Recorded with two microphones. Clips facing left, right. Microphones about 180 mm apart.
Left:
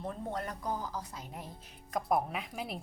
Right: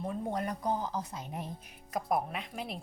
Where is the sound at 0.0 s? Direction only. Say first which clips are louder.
Right 3 dB; 15° right (ahead or behind).